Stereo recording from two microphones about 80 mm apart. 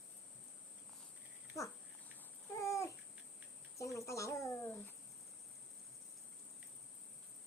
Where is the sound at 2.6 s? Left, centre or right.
Left.